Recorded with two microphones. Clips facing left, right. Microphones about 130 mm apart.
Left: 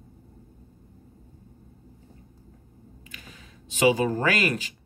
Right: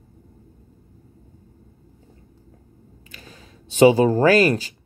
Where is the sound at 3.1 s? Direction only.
35° right (ahead or behind).